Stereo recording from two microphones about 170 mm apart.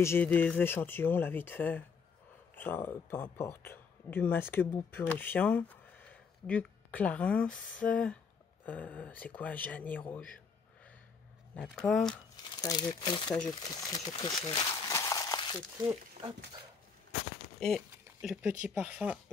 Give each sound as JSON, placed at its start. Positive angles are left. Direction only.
{"t": 0.0, "sound": "speech", "side_deg": 10}
{"t": 11.5, "sound": "speech", "side_deg": 5}
{"t": 12.6, "sound": "speech", "side_deg": 25}
{"t": 14.4, "sound": "crumpling", "side_deg": 20}
{"t": 17.6, "sound": "a sound", "side_deg": 0}
{"t": 18.4, "sound": "speech", "side_deg": -10}